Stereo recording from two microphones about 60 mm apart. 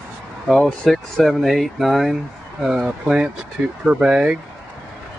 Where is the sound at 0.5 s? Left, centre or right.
Centre.